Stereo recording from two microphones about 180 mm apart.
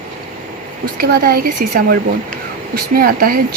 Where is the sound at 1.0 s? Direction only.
55° right (ahead or behind).